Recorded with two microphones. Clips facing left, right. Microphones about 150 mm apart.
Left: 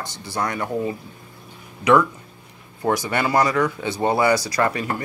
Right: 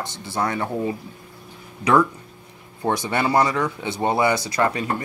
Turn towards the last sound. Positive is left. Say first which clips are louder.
# even
turn(degrees=-30)  # may be behind; listen again after turning